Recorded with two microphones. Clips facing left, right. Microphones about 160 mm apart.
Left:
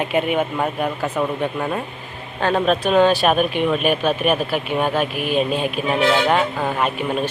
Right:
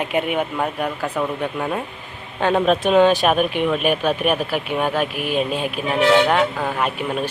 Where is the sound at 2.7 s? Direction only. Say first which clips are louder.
Right 1 dB; 15° right (ahead or behind).